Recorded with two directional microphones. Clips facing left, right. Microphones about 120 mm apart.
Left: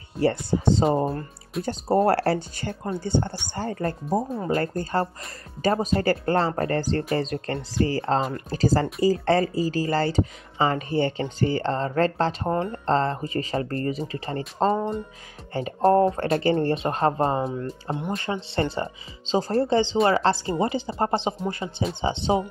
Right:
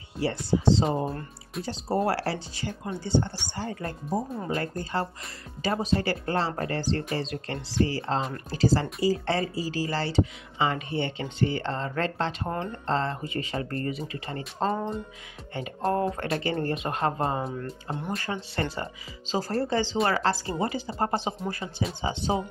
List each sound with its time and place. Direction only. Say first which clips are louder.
0.2 s speech: left 3 dB; 50° left (ahead or behind); by 14.4 s 35° left (ahead or behind)
15.5 s speech: left 8 dB; 35° left (ahead or behind)